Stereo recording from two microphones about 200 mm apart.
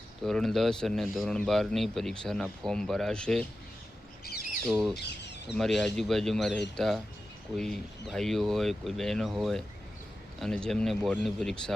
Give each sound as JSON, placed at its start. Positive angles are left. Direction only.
{"t": 0.3, "sound": "a man's voice", "side_deg": 0}
{"t": 4.2, "sound": "bird", "side_deg": 50}
{"t": 4.9, "sound": "speech", "side_deg": 60}
{"t": 5.5, "sound": "a man's voice", "side_deg": 0}